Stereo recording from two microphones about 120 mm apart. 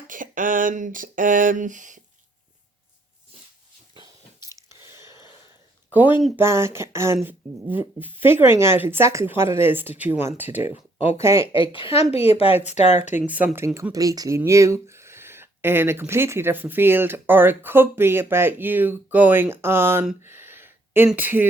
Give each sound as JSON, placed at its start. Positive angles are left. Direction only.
{"t": 0.1, "sound": "a sound", "side_deg": -90}
{"t": 5.9, "sound": "speech", "side_deg": -15}
{"t": 11.5, "sound": "speech", "side_deg": 45}
{"t": 13.2, "sound": "speech", "side_deg": -15}
{"t": 13.9, "sound": "speech", "side_deg": -30}
{"t": 20.2, "sound": "a sound", "side_deg": -20}
{"t": 21.1, "sound": "speech", "side_deg": -15}